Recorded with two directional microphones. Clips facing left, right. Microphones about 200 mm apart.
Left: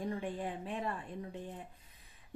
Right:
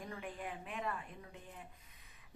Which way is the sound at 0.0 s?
30° left (ahead or behind).